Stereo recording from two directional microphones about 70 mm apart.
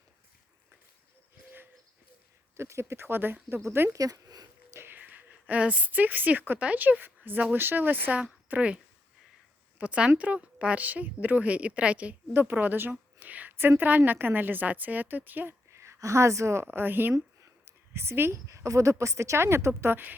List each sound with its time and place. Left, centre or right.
2.6 s a woman's voice: right
3.6 s a woman's voice: right
3.9 s speech: right
4.7 s a woman's voice: right
12.3 s a woman's voice: right
15.7 s speech: right
16.6 s a woman's voice: right